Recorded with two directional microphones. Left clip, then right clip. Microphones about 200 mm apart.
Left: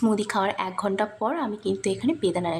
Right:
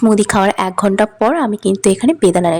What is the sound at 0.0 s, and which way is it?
A woman's voice, 35° right (ahead or behind).